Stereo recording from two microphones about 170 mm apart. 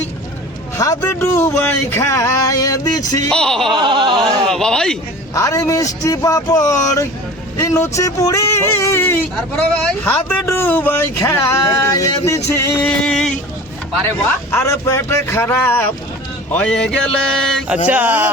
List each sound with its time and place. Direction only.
0.8 s speech: 15° left (ahead or behind)
3.2 s speech: 5° left (ahead or behind)
3.7 s a sound: 30° right (ahead or behind)
4.2 s speech: 5° left (ahead or behind)
5.3 s speech: 20° left (ahead or behind)
12.8 s speech: 5° left (ahead or behind)
14.5 s speech: 15° left (ahead or behind)
17.8 s music: 10° right (ahead or behind)